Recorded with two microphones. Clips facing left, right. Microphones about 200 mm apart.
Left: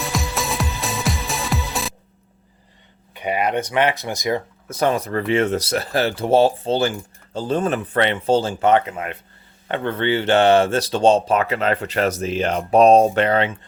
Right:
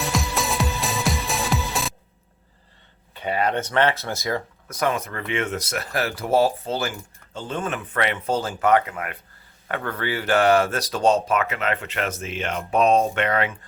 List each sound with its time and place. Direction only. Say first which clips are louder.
0.0 s music: even; centre (ahead or behind)
3.2 s speech: left 2 dB; 15° left (ahead or behind)
4.7 s speech: left 5 dB; 30° left (ahead or behind)